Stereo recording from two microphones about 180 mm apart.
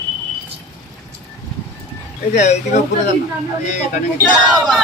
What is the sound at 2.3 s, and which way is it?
Speech, 40° left (ahead or behind).